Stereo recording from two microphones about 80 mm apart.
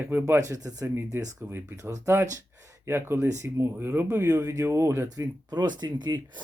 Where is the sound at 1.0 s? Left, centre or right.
Right.